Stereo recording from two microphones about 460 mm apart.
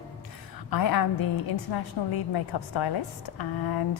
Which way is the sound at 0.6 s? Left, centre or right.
Left.